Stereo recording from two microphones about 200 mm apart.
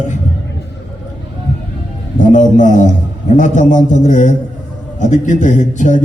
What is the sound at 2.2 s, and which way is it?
A man's voice, 40° left (ahead or behind).